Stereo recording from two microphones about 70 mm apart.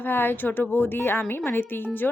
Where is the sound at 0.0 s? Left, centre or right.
Left.